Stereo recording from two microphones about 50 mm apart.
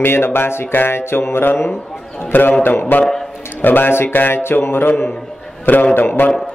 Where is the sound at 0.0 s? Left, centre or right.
Left.